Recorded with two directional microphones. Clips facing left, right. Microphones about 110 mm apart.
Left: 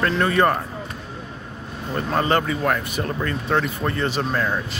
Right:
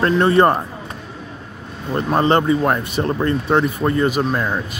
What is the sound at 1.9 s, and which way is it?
Speech, 25° right (ahead or behind).